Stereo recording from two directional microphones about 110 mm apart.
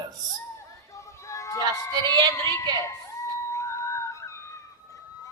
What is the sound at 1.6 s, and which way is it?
Speech, 35° right (ahead or behind).